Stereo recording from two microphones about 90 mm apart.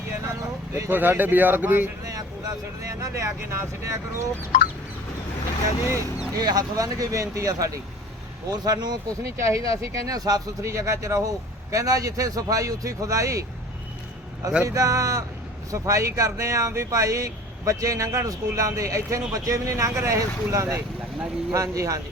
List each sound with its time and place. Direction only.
0.3 s a sound: 35° right (ahead or behind)
0.9 s speech: 20° right (ahead or behind)
2.0 s speech: 45° right (ahead or behind)
5.8 s speech: 30° right (ahead or behind)
6.3 s speech: 45° right (ahead or behind)
9.4 s speech: 35° right (ahead or behind)
14.6 s speech: 40° right (ahead or behind)